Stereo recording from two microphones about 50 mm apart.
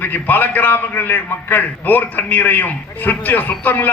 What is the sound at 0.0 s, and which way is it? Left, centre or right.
A man's voice, left.